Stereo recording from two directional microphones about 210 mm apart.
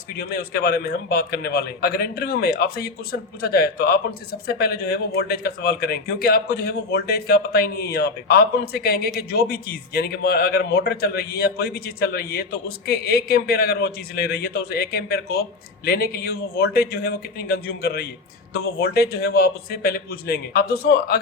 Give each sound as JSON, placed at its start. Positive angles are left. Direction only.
{"t": 0.2, "sound": "a man's voice", "side_deg": 50}